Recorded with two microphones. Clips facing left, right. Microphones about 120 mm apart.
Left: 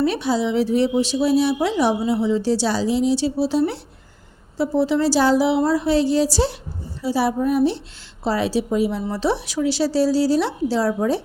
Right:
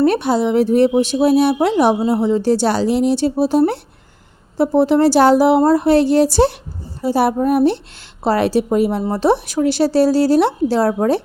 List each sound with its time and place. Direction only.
0.0 s a woman's voice: 55° right (ahead or behind)